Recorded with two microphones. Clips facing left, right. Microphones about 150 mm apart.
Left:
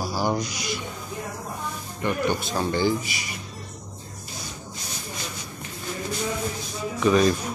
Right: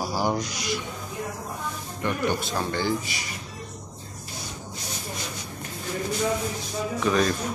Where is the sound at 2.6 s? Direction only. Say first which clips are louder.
Left 3 dB; 15° left (ahead or behind).